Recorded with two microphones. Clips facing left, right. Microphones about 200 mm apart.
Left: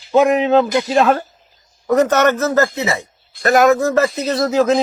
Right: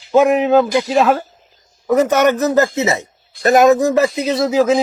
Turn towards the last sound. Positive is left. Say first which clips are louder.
# right 1 dB
turn(degrees=-10)  # may be behind; listen again after turning